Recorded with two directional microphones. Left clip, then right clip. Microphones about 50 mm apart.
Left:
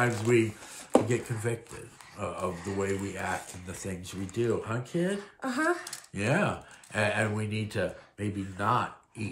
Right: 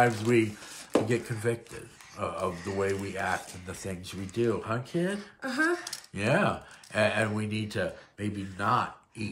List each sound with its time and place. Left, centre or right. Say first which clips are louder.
0.0 s speech: right 2 dB; right
1.0 s speech: right 2 dB; right
4.0 s speech: right 2 dB; right
5.6 s speech: right 1 dB; left
6.1 s speech: right 2 dB; right
6.9 s speech: right 2 dB; right
7.6 s speech: even; centre